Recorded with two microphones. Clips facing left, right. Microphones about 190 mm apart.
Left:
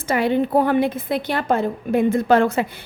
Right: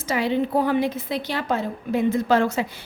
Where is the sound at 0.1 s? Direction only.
55° left (ahead or behind).